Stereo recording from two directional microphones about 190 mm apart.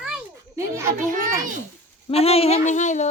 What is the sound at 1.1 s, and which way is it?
Speech, 45° right (ahead or behind).